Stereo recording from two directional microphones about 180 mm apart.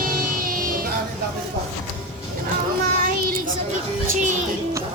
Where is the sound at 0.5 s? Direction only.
50° right (ahead or behind).